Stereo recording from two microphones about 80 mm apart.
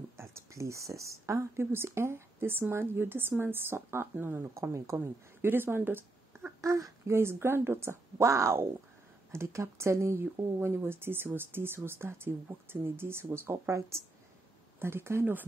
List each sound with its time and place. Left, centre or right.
0.2 s speech: right
6.6 s speech: right